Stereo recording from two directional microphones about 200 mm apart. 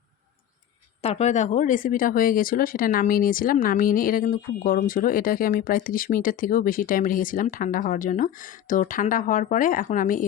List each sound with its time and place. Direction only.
1.0 s speech: 35° left (ahead or behind)